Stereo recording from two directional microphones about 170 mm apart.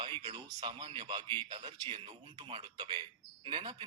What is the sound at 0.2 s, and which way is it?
A man's voice, 30° right (ahead or behind).